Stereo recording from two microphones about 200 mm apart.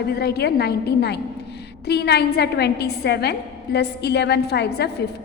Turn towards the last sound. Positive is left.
turn(degrees=50)  # may be behind; listen again after turning